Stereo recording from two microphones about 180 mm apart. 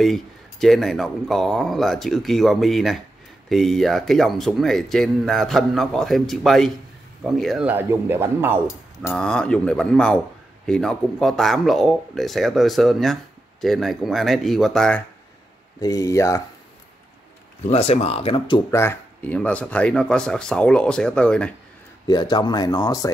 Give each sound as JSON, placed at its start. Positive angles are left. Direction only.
{"t": 0.0, "sound": "speech", "side_deg": 0}
{"t": 9.1, "sound": "speech", "side_deg": 5}
{"t": 15.8, "sound": "speech", "side_deg": 20}
{"t": 17.6, "sound": "speech", "side_deg": 35}
{"t": 18.7, "sound": "speech", "side_deg": 15}
{"t": 22.0, "sound": "speech", "side_deg": 25}